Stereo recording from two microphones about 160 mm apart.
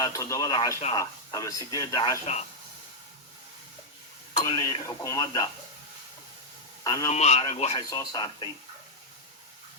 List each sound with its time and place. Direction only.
0.0 s speech: 20° left (ahead or behind)
4.4 s speech: 25° left (ahead or behind)
6.8 s speech: 25° left (ahead or behind)
7.1 s speech: 45° left (ahead or behind)
7.8 s speech: 25° left (ahead or behind)